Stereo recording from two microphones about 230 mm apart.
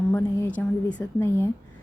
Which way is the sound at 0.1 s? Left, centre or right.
Centre.